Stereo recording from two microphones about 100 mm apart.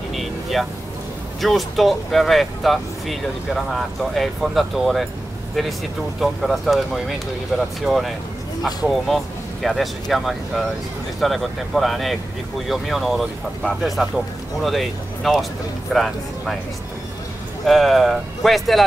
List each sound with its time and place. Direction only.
0.1 s vehicle: centre (ahead or behind)
1.4 s speech: centre (ahead or behind)
6.2 s speech: centre (ahead or behind)
17.6 s speech: centre (ahead or behind)